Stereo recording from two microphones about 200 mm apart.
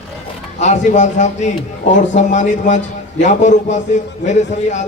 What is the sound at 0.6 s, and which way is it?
A man's voice, 35° left (ahead or behind).